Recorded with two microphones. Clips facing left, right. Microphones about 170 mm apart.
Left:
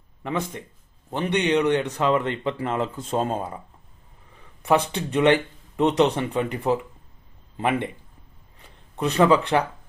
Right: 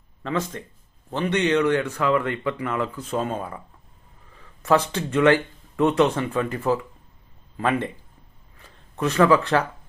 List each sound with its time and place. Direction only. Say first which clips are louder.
0.2 s speech: right 1 dB; 15° left (ahead or behind)
4.6 s speech: right 1 dB; 15° left (ahead or behind)
8.5 s a sound: right 1 dB; 20° left (ahead or behind)